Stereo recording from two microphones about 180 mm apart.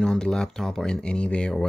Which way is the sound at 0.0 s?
5° left (ahead or behind).